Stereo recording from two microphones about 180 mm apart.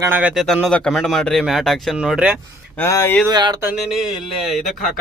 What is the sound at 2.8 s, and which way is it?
Speech, 15° left (ahead or behind).